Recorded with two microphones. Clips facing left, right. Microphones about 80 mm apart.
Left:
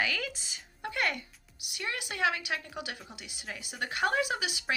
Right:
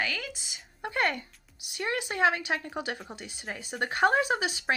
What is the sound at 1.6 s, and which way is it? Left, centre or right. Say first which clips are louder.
Speech: right 6 dB; right.